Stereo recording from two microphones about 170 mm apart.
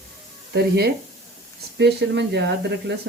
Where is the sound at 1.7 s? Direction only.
90° right.